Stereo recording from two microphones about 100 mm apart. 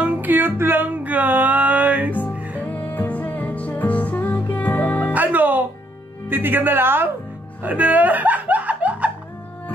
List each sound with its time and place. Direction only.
0.0 s music: 15° right (ahead or behind)
2.6 s music: 15° left (ahead or behind)
5.1 s music: 15° right (ahead or behind)
6.2 s speech: 20° right (ahead or behind)
7.6 s music: 15° right (ahead or behind)